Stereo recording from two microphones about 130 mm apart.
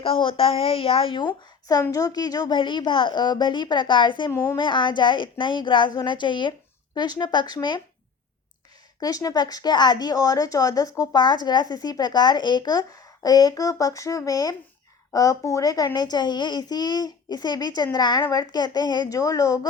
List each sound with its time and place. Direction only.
0.0 s a child's voice: 45° left (ahead or behind)
4.3 s a child's voice: 25° left (ahead or behind)
9.0 s a child's voice: 30° left (ahead or behind)